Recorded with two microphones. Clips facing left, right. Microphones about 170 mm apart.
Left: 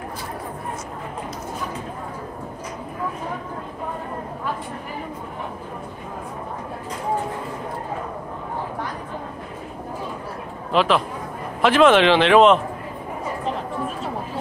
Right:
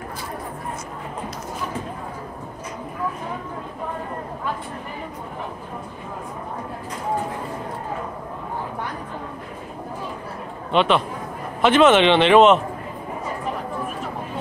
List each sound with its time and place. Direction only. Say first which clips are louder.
10.7 s a man's voice: even; centre (ahead or behind)